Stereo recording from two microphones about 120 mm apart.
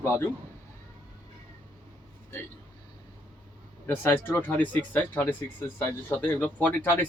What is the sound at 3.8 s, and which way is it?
Speech, 20° left (ahead or behind).